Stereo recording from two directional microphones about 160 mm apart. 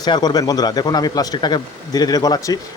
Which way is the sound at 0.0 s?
25° left (ahead or behind).